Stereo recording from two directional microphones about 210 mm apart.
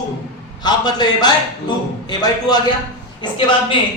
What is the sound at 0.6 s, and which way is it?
A man's voice, 20° left (ahead or behind).